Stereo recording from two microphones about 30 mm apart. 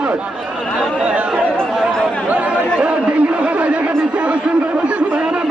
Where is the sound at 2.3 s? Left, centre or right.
Right.